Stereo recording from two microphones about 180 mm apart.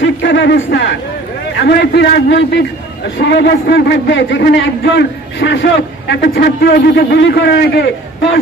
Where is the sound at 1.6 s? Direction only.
65° left (ahead or behind).